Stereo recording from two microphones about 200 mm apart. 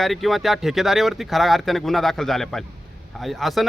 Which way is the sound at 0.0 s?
Centre (ahead or behind).